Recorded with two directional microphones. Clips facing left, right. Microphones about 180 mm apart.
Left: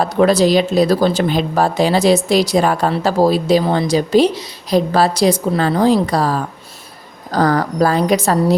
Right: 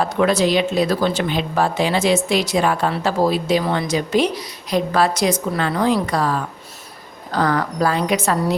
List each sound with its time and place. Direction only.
0.0 s speech: 35° left (ahead or behind)